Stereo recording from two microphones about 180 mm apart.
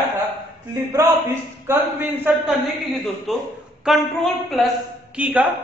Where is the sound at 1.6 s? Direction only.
10° right (ahead or behind).